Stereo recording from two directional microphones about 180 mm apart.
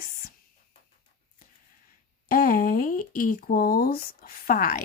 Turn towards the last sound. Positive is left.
turn(degrees=50)  # may be behind; listen again after turning